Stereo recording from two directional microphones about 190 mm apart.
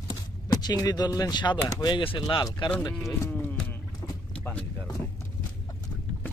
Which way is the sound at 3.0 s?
5° left (ahead or behind).